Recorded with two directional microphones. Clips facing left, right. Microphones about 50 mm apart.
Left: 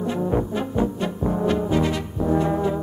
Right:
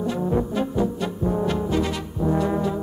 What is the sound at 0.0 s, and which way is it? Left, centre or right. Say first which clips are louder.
Brass instrument: even; left.